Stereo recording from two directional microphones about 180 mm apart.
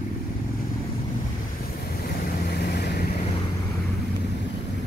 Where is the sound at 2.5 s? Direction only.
65° left (ahead or behind).